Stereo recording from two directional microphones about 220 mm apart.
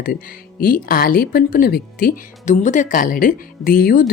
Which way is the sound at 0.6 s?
40° left (ahead or behind).